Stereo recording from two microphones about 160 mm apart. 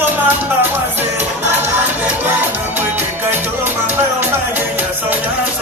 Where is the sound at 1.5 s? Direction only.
15° right (ahead or behind).